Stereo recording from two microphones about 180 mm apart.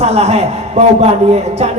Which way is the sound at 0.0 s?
35° right (ahead or behind).